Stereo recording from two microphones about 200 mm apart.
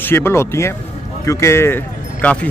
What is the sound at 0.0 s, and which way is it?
Speech, 10° left (ahead or behind).